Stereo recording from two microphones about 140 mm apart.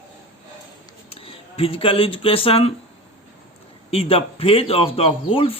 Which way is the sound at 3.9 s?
40° left (ahead or behind).